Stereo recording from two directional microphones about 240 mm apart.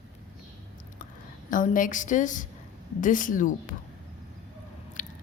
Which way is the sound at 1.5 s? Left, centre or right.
Left.